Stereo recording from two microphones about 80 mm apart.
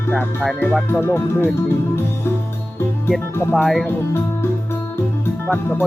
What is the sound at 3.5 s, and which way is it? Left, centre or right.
Speech, centre.